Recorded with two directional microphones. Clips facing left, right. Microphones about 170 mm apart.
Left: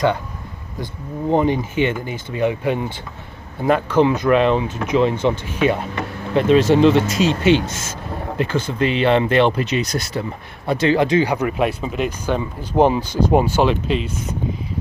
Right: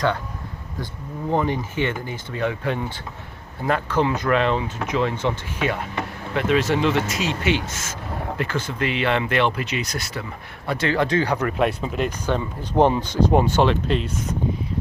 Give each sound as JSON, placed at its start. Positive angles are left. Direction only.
{"t": 1.3, "sound": "speech", "side_deg": 20}
{"t": 10.7, "sound": "speech", "side_deg": 20}